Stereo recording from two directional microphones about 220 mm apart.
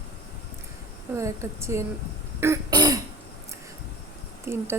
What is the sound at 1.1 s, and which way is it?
Speech, 15° right (ahead or behind).